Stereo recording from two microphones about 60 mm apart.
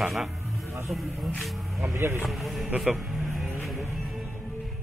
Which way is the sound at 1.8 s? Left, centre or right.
Right.